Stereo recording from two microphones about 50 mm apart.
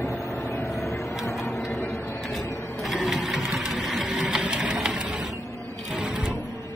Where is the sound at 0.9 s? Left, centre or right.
Left.